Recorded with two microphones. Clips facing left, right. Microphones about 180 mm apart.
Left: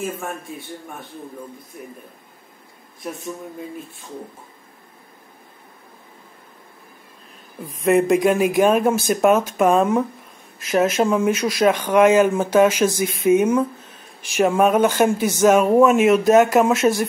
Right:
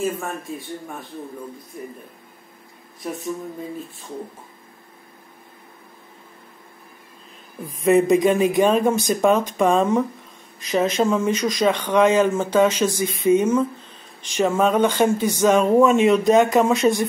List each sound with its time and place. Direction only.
7.6 s speech: centre (ahead or behind)